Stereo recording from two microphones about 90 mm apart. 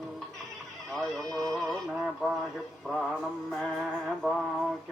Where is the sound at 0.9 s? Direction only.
5° left (ahead or behind).